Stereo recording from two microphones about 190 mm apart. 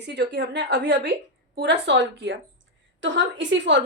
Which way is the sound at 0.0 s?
65° right (ahead or behind).